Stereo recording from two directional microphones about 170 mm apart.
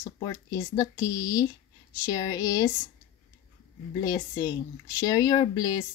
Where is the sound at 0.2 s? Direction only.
20° left (ahead or behind).